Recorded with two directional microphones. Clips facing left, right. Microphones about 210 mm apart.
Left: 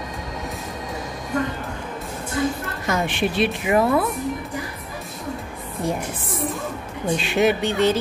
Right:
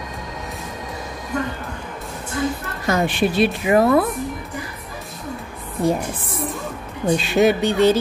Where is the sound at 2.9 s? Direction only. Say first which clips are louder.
Right 4 dB; 35° right (ahead or behind).